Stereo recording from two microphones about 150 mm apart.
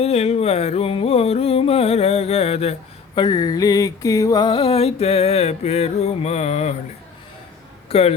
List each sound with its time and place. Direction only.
0.0 s music: 45° left (ahead or behind)
3.2 s music: 25° left (ahead or behind); by 6.7 s 45° left (ahead or behind)
7.9 s speech: 45° left (ahead or behind)